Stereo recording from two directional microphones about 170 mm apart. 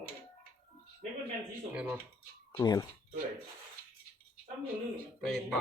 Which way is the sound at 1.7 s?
10° right (ahead or behind).